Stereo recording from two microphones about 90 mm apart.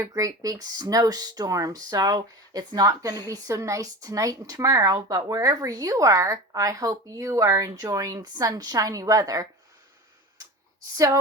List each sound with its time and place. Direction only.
0.0 s speech: 40° right (ahead or behind)
10.9 s speech: 40° right (ahead or behind)